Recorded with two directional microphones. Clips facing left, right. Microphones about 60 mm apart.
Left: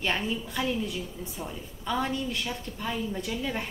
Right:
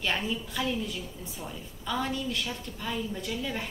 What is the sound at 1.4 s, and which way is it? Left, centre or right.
Speech, left.